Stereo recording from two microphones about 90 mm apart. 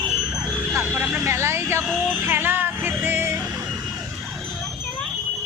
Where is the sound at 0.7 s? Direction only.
25° right (ahead or behind).